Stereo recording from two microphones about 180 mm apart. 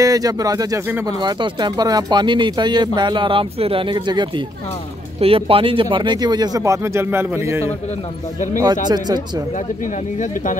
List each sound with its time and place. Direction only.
0.0 s speech: 20° right (ahead or behind)
1.2 s speech: 25° right (ahead or behind)
8.8 s speech: 25° right (ahead or behind)
10.1 s speech: 45° left (ahead or behind)